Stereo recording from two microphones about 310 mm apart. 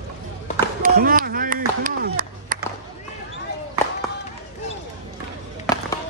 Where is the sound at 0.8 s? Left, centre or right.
Right.